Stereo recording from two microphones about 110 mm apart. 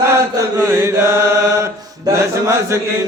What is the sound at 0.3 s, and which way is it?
Chant, 25° right (ahead or behind).